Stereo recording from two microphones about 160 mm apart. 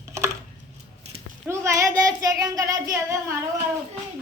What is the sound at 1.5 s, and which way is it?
Child singing, 20° right (ahead or behind).